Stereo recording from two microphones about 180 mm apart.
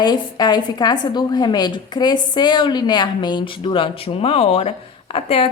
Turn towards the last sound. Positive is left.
turn(degrees=35)  # may be behind; listen again after turning